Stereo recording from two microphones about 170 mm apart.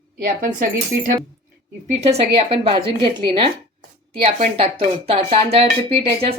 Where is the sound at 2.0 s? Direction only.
40° right (ahead or behind).